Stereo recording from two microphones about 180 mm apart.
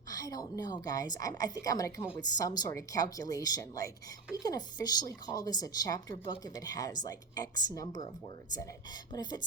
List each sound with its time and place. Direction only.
0.1 s speech: 20° left (ahead or behind)